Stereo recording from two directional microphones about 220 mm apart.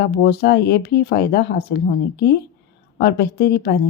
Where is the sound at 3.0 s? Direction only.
45° left (ahead or behind).